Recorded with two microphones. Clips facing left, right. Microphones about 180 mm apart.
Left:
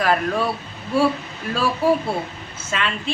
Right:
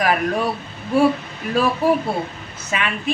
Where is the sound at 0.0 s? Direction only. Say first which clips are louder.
Right 1 dB; 15° right (ahead or behind).